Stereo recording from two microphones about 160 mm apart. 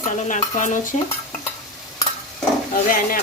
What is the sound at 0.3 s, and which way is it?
Stir, 50° left (ahead or behind).